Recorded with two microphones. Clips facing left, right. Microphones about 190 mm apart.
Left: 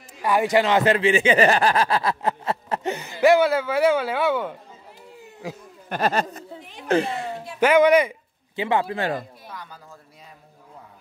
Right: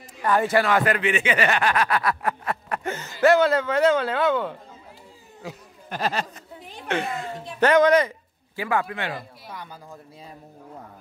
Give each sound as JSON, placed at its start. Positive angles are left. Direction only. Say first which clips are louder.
{"t": 0.2, "sound": "speech", "louder": "left 1 dB", "side_deg": 15}
{"t": 5.9, "sound": "speech", "louder": "left 4 dB", "side_deg": 55}
{"t": 6.9, "sound": "speech", "louder": "left 5 dB", "side_deg": 30}
{"t": 7.6, "sound": "speech", "louder": "left 1 dB", "side_deg": 10}
{"t": 8.5, "sound": "speech", "louder": "left 3 dB", "side_deg": 25}
{"t": 9.5, "sound": "speech", "louder": "right 1 dB", "side_deg": -10}